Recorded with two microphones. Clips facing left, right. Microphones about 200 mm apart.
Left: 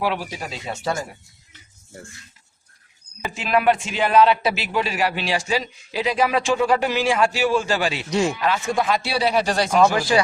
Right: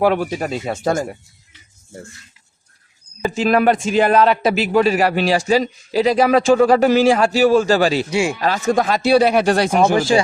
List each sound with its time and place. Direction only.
0.0 s speech: 50° right (ahead or behind)
3.3 s a man's voice: 40° right (ahead or behind)
8.1 s speech: 10° right (ahead or behind)
8.4 s speech: 40° right (ahead or behind); by 9.6 s 55° right (ahead or behind)
9.7 s speech: 20° right (ahead or behind)